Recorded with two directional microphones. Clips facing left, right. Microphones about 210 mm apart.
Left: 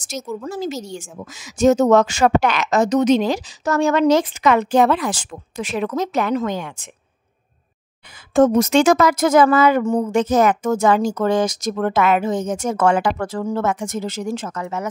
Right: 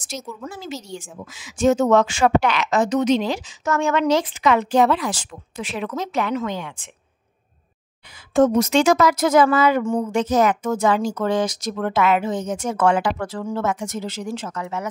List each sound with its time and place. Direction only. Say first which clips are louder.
0.5 s a woman's voice: left 6 dB; 40° left (ahead or behind)
8.3 s a woman's voice: left 2 dB; 50° left (ahead or behind)